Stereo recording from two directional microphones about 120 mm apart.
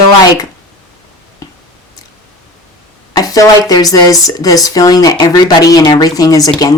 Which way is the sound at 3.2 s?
30° left (ahead or behind).